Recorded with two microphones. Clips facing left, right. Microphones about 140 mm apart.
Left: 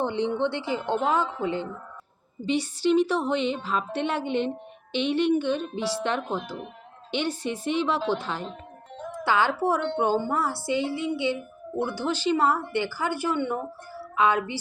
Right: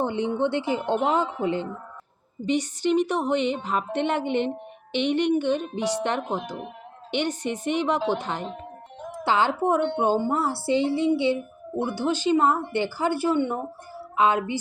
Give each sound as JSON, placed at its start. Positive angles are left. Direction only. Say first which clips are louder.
{"t": 0.0, "sound": "a woman's voice", "louder": "right 1 dB", "side_deg": -15}